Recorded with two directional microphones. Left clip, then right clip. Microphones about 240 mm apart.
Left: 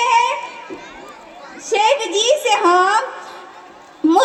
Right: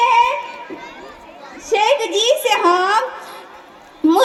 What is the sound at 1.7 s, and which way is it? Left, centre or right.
A woman's voice, right.